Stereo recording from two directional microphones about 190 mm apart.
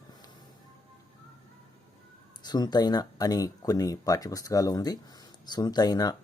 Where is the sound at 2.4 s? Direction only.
20° left (ahead or behind).